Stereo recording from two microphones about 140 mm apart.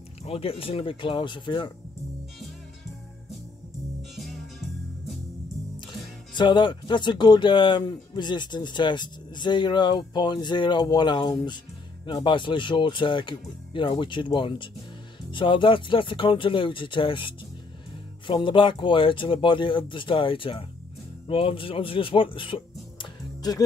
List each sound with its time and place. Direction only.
0.2 s speech: 45° left (ahead or behind)
4.1 s music: centre (ahead or behind)
6.3 s speech: 35° left (ahead or behind)